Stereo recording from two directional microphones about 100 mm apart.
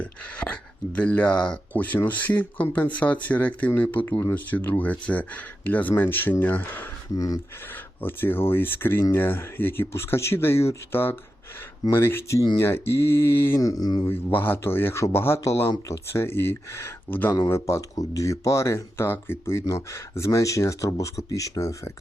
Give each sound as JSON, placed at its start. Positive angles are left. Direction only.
{"t": 0.0, "sound": "speech", "side_deg": 10}
{"t": 7.2, "sound": "speech", "side_deg": 40}
{"t": 7.7, "sound": "speech", "side_deg": 20}
{"t": 13.6, "sound": "speech", "side_deg": 35}
{"t": 14.3, "sound": "speech", "side_deg": 20}
{"t": 17.5, "sound": "speech", "side_deg": 30}